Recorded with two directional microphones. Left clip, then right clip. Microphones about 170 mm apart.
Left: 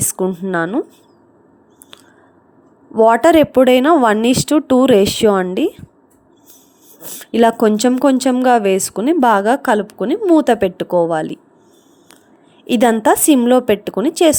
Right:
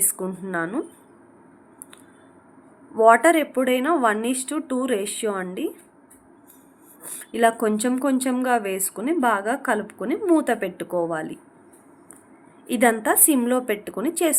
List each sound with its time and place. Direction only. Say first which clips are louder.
0.0 s a woman's voice: left 10 dB; 50° left (ahead or behind)
2.9 s speech: left 5 dB; 55° left (ahead or behind)
7.3 s speech: left 8 dB; 55° left (ahead or behind)
12.6 s speech: left 7 dB; 60° left (ahead or behind)